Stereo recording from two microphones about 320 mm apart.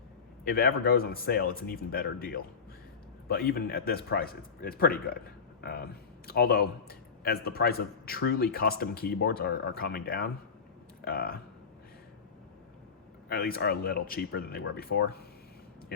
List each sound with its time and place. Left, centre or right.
0.4 s a man's voice: left
13.2 s a man's voice: left